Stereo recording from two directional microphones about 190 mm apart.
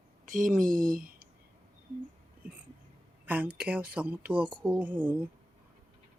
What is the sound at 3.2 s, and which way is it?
A woman's voice, 10° right (ahead or behind).